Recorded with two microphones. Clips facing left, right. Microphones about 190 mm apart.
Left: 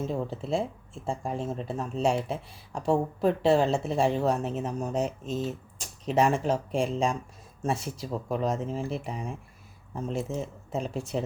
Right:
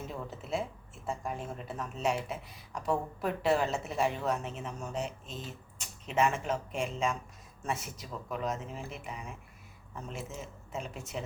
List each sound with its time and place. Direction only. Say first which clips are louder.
0.0 s speech: left 9 dB; 30° left (ahead or behind)